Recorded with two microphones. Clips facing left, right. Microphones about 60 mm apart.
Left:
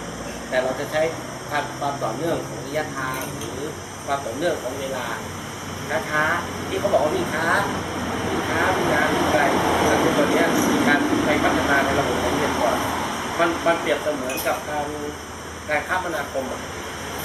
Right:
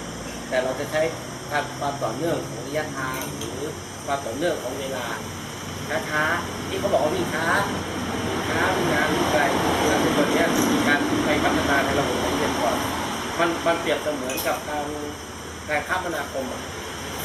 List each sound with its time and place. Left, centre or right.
0.5 s speech: centre
5.9 s speech: centre